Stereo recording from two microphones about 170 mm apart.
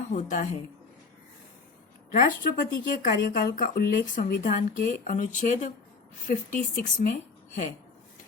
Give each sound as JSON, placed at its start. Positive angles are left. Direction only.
{"t": 0.1, "sound": "speech", "side_deg": 45}
{"t": 2.0, "sound": "speech", "side_deg": 50}